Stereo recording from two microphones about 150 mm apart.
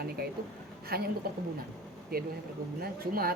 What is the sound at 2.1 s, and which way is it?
Speech, 80° right.